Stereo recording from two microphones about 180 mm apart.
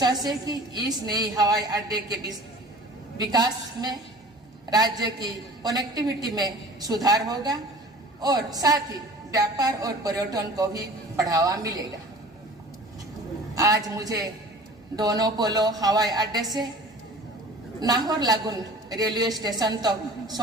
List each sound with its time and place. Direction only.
0.0 s a man's voice: 20° right (ahead or behind)
13.6 s a man's voice: 20° right (ahead or behind)
17.7 s a man's voice: 20° right (ahead or behind)